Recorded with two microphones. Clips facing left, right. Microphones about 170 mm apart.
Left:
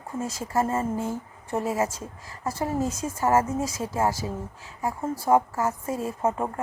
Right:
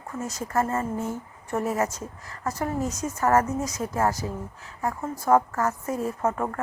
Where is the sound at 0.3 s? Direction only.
10° left (ahead or behind).